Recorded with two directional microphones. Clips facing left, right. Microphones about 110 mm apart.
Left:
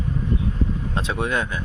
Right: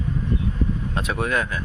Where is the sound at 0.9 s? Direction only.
25° left (ahead or behind).